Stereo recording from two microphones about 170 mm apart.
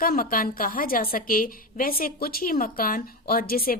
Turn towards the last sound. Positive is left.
turn(degrees=60)  # may be behind; listen again after turning